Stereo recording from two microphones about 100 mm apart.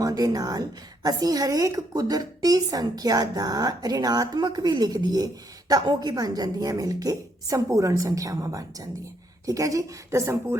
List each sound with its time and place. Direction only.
0.0 s a woman's voice: 40° right (ahead or behind)